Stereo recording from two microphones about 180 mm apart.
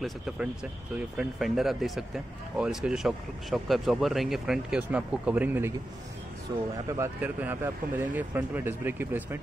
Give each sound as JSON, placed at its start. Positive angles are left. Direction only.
{"t": 0.9, "sound": "speech", "side_deg": -5}
{"t": 6.5, "sound": "speech", "side_deg": -25}
{"t": 6.9, "sound": "speech", "side_deg": -10}